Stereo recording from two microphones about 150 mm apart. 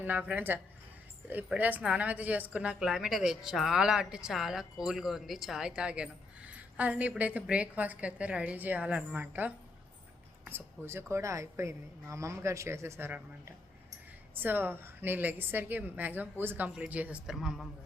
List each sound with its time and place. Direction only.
0.0 s a woman's voice: 10° right (ahead or behind)
14.3 s a woman's voice: 15° right (ahead or behind)